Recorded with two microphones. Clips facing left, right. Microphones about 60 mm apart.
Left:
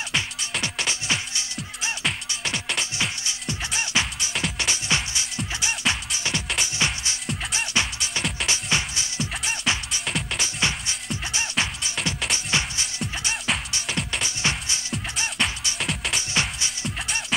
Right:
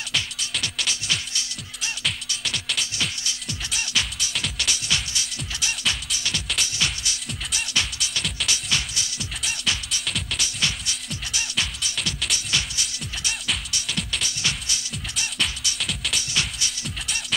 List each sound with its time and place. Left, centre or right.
0.1 s music: left
2.8 s music: left